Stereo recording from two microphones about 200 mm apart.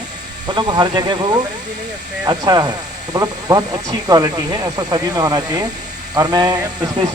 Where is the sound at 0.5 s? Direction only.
20° right (ahead or behind).